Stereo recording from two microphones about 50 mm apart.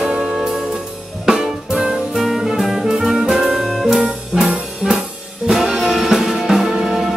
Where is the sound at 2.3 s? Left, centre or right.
Centre.